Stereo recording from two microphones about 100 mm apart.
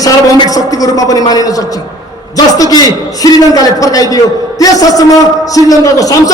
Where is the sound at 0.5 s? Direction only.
35° left (ahead or behind).